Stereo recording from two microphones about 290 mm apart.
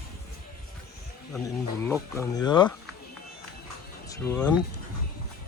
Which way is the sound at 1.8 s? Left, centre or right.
Centre.